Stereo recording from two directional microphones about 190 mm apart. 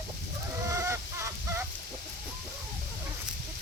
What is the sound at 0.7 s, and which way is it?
Fowl, 15° right (ahead or behind).